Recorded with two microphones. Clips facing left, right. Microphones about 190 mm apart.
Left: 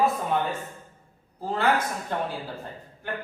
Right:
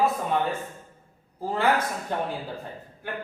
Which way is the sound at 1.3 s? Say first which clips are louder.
Even; 10° right (ahead or behind).